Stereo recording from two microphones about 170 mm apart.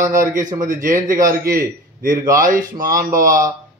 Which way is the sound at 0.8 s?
50° right (ahead or behind).